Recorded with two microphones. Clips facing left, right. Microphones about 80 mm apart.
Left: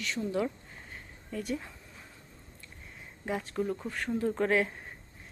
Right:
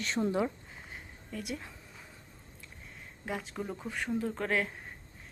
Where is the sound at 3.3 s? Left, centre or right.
Centre.